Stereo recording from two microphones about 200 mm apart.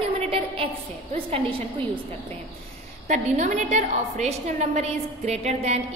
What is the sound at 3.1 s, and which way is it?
A woman's voice, 35° right (ahead or behind).